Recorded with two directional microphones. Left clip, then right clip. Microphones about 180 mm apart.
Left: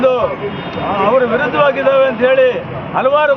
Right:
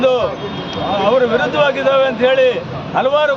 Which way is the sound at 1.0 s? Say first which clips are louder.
Left 1 dB; 20° right (ahead or behind).